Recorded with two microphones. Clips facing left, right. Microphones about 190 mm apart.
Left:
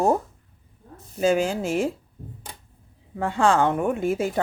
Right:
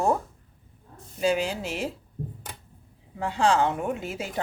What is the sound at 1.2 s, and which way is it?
Speech, 45° left (ahead or behind).